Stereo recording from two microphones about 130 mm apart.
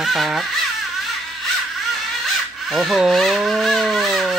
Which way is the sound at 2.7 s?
Centre (ahead or behind).